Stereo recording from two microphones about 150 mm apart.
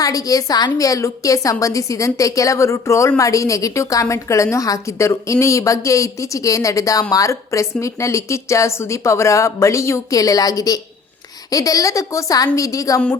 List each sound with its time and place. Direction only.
0.0 s a woman's voice: 25° left (ahead or behind)